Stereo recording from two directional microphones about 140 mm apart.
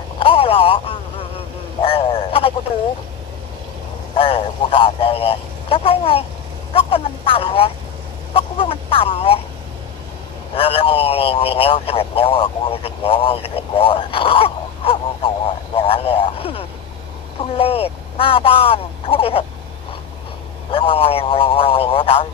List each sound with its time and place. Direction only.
0.2 s a sound: 40° left (ahead or behind)
4.2 s speech: 40° left (ahead or behind)
10.5 s speech: 40° left (ahead or behind)
20.7 s speech: 40° left (ahead or behind)